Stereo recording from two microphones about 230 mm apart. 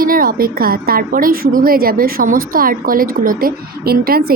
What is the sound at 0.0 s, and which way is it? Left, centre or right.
A woman's voice, right.